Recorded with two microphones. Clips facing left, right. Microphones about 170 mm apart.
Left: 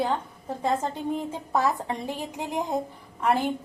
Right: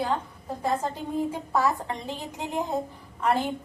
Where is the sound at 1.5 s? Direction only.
15° left (ahead or behind).